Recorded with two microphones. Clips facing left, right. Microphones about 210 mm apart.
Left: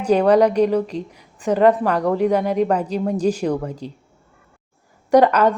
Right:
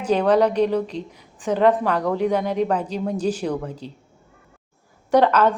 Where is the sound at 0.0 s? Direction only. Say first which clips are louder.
Left 3 dB; 10° left (ahead or behind).